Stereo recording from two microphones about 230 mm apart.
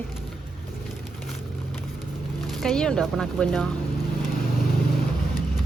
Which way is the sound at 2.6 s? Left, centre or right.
Centre.